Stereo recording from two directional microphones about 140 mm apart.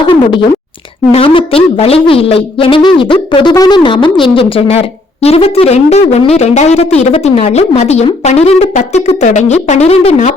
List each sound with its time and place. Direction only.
0.1 s a woman's voice: 35° left (ahead or behind)